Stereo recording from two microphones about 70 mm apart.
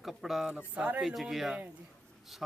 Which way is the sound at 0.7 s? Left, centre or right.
Centre.